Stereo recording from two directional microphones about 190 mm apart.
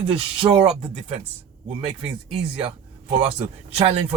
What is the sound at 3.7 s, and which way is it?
Speech, 35° right (ahead or behind).